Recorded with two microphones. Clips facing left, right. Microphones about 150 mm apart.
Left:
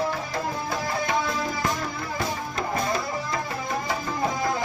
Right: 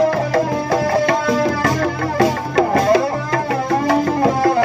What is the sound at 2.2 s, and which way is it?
Music, 85° right.